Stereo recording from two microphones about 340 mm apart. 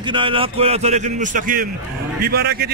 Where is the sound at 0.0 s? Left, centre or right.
Centre.